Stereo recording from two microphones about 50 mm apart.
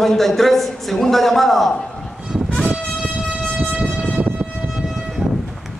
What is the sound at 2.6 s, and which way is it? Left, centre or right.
Vehicle, centre.